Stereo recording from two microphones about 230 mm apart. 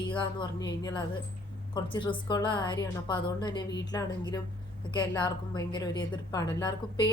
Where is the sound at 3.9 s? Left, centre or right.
Centre.